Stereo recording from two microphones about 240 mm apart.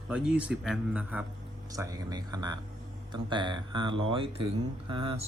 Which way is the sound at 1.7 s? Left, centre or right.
Centre.